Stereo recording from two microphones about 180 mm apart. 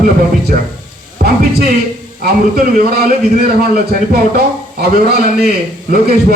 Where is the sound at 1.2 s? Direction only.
60° right (ahead or behind).